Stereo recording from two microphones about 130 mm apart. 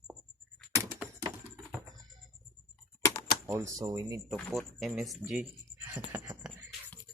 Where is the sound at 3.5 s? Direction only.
20° right (ahead or behind).